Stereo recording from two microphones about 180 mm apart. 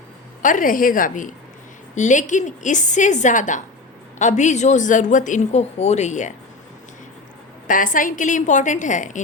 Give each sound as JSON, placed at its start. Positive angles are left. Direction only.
{"t": 0.4, "sound": "a woman's voice", "side_deg": 50}
{"t": 7.7, "sound": "a woman's voice", "side_deg": 50}